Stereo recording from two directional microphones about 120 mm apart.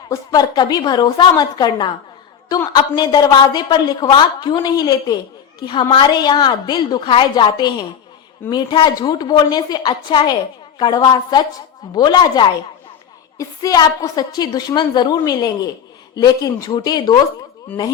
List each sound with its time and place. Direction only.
0.1 s a woman's voice: 30° left (ahead or behind)
5.5 s a woman's voice: 45° left (ahead or behind)